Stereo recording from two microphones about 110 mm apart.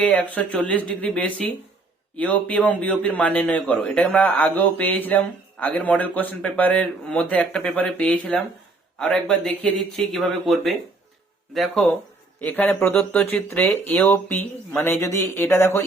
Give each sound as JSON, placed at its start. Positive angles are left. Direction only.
{"t": 0.0, "sound": "a man's voice", "side_deg": 10}
{"t": 12.4, "sound": "a man's voice", "side_deg": 15}